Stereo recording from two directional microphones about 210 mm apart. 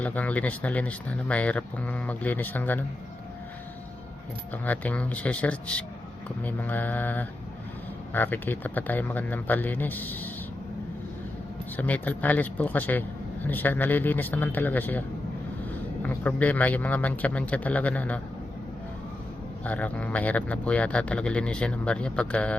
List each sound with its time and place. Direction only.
0.0 s a man's voice: 5° left (ahead or behind)
4.5 s a man's voice: 10° left (ahead or behind)
11.8 s a man's voice: 10° left (ahead or behind)
16.0 s a man's voice: 5° left (ahead or behind)
19.6 s speech: 5° left (ahead or behind)